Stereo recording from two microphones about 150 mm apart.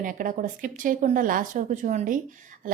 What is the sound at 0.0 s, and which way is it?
A woman's voice, 65° right (ahead or behind).